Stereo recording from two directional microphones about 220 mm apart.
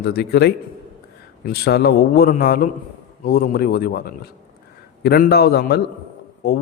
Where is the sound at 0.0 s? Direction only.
45° left (ahead or behind).